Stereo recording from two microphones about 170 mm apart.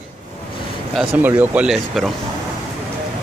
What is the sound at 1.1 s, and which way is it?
Speech, 10° right (ahead or behind).